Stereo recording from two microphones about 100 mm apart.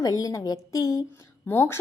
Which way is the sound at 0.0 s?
35° left (ahead or behind).